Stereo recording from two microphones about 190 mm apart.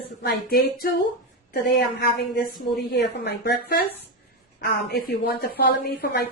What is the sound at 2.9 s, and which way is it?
Speech, 60° left (ahead or behind).